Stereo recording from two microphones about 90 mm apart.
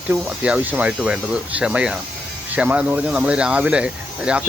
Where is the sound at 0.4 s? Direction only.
15° right (ahead or behind).